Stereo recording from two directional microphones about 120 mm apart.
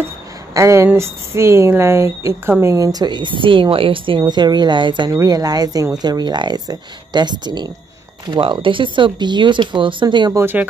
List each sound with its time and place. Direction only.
0.6 s a woman's voice: 25° right (ahead or behind); by 4.2 s 45° right (ahead or behind)
4.2 s speech: 35° right (ahead or behind)
5.1 s speech: 30° right (ahead or behind)
10.3 s speech: 15° right (ahead or behind)